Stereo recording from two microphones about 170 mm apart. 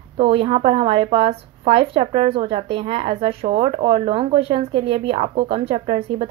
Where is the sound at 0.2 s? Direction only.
35° right (ahead or behind).